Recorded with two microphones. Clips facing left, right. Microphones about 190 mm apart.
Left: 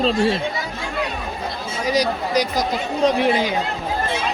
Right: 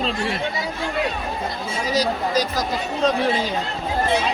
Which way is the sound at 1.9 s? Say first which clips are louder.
Left 1 dB; 15° left (ahead or behind).